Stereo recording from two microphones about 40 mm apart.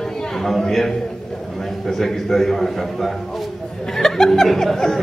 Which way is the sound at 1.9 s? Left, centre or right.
Centre.